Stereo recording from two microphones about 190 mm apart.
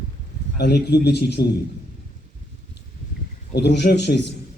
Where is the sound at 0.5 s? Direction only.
60° left (ahead or behind).